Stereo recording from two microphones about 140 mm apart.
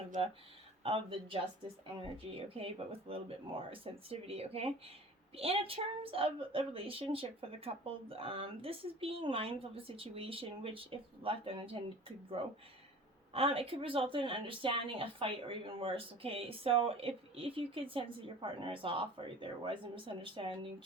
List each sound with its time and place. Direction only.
0.9 s a woman's voice: 40° right (ahead or behind)